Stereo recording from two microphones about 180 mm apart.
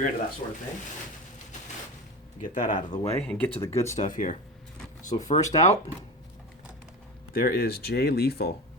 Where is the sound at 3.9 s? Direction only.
45° left (ahead or behind).